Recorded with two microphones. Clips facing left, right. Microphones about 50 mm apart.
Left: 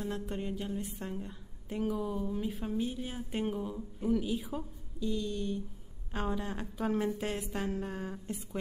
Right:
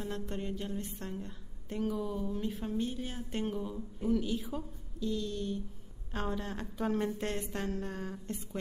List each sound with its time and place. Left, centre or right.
0.1 s a woman's voice: centre